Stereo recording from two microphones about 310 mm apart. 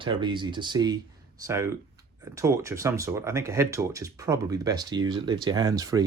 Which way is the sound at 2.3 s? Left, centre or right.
Centre.